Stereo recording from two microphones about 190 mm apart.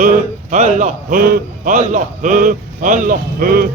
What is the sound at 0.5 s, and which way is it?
A man's voice, 40° right (ahead or behind).